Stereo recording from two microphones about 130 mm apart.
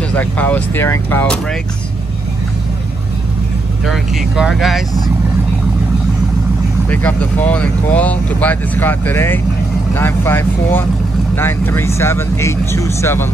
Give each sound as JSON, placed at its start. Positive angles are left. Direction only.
{"t": 0.1, "sound": "speech", "side_deg": 10}
{"t": 1.2, "sound": "speech", "side_deg": 5}
{"t": 3.8, "sound": "speech", "side_deg": 0}
{"t": 6.9, "sound": "speech", "side_deg": 10}